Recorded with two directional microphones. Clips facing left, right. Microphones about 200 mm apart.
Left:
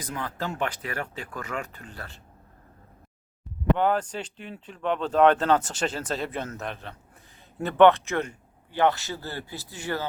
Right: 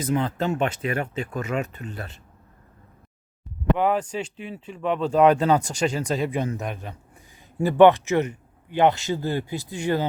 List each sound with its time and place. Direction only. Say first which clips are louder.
0.0 s speech: right 9 dB; 25° right (ahead or behind)
3.8 s speech: right 2 dB; 5° right (ahead or behind)